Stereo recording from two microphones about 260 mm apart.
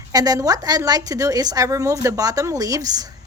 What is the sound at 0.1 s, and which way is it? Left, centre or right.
A woman's voice, centre.